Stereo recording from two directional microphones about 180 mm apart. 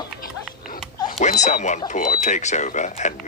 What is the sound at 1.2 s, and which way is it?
Speech, 40° left (ahead or behind).